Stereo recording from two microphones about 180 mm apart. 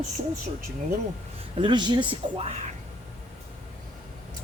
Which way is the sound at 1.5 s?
25° right (ahead or behind).